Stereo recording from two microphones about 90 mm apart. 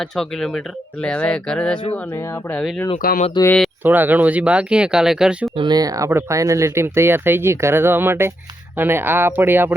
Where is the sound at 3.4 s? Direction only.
55° left (ahead or behind).